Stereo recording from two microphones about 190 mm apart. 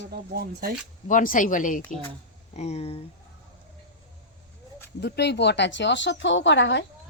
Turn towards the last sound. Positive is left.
turn(degrees=70)  # may be behind; listen again after turning